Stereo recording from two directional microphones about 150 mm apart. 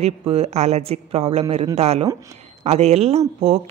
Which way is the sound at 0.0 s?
45° right (ahead or behind).